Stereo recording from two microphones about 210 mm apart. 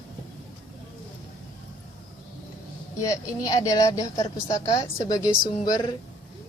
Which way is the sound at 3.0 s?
15° left (ahead or behind).